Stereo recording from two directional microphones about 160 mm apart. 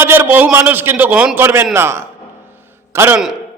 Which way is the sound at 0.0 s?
15° right (ahead or behind).